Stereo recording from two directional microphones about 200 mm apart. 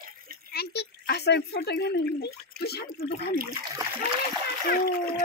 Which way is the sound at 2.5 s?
55° left (ahead or behind).